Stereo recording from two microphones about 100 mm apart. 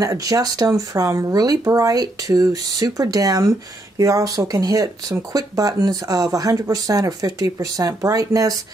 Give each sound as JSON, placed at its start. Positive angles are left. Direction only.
{"t": 0.0, "sound": "speech", "side_deg": -35}